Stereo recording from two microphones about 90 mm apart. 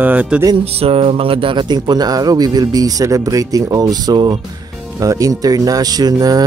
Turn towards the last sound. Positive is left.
turn(degrees=-45)  # may be behind; listen again after turning